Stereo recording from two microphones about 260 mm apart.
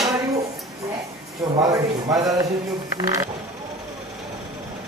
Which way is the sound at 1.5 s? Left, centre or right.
Centre.